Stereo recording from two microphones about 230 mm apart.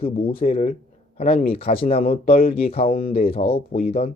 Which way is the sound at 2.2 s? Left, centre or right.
Left.